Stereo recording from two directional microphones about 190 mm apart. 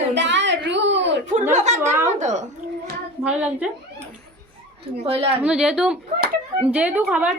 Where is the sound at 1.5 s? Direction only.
40° right (ahead or behind).